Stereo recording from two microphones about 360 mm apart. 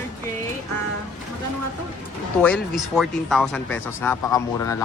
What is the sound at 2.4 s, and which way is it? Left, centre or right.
Speech, centre.